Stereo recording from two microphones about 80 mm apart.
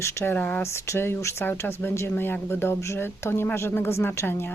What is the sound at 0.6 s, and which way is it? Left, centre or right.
Speech, left.